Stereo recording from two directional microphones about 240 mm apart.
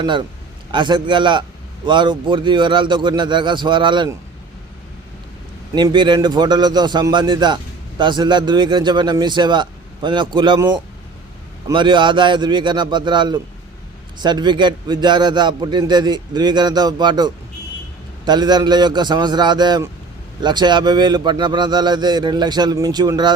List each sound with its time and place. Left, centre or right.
0.0 s a man's voice: centre
5.7 s a man's voice: centre